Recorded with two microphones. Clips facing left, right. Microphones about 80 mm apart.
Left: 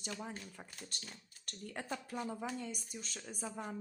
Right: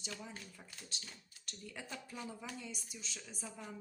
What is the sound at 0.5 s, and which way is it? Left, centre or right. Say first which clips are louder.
A woman's voice: left 3 dB; left.